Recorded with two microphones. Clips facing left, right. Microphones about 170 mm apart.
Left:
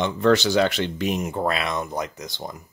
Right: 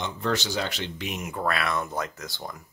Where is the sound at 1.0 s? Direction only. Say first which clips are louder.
Left 7 dB; 35° left (ahead or behind); by 2.5 s 20° left (ahead or behind).